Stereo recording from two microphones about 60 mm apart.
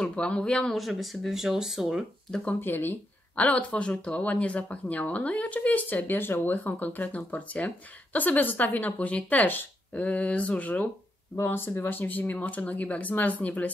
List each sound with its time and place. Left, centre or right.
0.0 s speech: centre
0.7 s speech: centre
2.6 s speech: left
3.4 s speech: left
11.3 s speech: left